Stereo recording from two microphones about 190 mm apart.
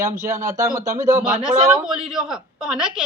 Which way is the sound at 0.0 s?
15° right (ahead or behind).